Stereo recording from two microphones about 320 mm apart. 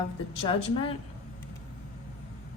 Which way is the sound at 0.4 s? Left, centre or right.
Centre.